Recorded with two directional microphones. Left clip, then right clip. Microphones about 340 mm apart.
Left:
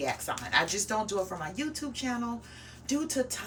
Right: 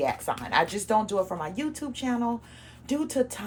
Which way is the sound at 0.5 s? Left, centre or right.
Centre.